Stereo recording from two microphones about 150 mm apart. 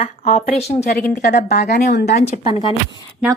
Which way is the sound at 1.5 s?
90° left.